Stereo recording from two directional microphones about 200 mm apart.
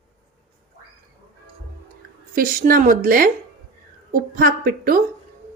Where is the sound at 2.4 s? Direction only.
45° right (ahead or behind).